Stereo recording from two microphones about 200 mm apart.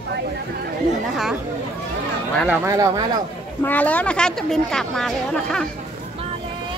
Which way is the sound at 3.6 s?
10° left (ahead or behind).